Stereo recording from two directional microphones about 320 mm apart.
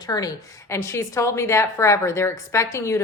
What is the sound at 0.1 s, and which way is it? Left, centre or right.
A woman's voice, centre.